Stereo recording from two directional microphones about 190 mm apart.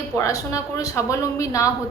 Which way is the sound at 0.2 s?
15° left (ahead or behind).